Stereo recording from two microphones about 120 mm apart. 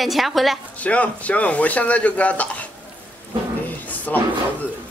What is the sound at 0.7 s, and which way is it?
A man's voice, 10° left (ahead or behind).